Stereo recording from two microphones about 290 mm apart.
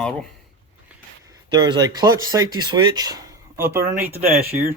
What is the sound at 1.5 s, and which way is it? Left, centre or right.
Speech, centre.